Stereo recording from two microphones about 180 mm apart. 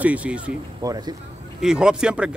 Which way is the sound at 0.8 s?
20° right (ahead or behind).